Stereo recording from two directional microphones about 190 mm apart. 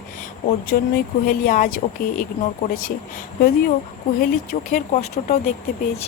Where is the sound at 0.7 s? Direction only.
50° left (ahead or behind).